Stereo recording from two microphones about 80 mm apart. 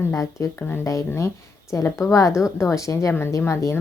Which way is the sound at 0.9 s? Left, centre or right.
Left.